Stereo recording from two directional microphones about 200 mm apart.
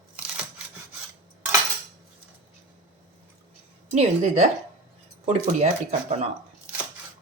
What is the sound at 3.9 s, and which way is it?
Speech, 35° right (ahead or behind).